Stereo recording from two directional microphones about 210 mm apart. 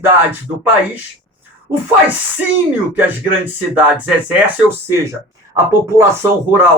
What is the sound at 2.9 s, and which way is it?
Speech, 10° right (ahead or behind).